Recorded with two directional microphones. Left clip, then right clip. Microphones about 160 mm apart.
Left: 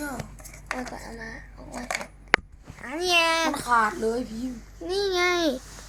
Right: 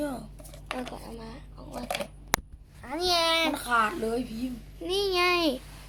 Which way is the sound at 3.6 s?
55° right (ahead or behind).